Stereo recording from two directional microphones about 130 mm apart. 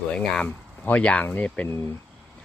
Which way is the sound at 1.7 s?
20° left (ahead or behind).